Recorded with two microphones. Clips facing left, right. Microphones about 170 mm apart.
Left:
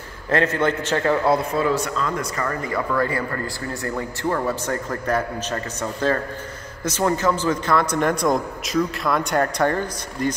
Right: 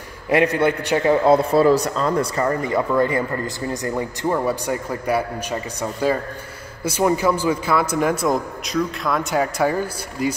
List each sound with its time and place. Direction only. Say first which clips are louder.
0.3 s speech: right 3 dB; 15° right (ahead or behind)
1.5 s a man's voice: right 6 dB; 35° right (ahead or behind); by 10.3 s 5° right (ahead or behind)